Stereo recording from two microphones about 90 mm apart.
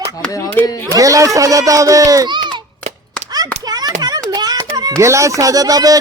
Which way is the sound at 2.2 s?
55° right (ahead or behind).